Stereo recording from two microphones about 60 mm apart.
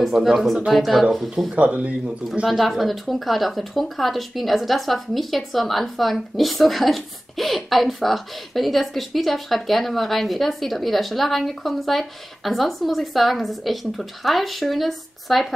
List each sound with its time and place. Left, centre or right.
0.1 s speech: centre
1.5 s speech: right
2.4 s speech: centre